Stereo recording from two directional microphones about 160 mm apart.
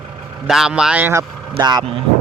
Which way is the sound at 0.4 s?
5° right (ahead or behind).